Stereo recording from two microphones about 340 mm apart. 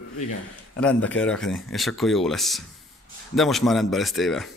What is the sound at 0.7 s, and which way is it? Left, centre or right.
A man's voice, centre.